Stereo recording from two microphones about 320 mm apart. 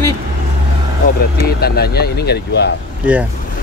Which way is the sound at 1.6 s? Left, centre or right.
Left.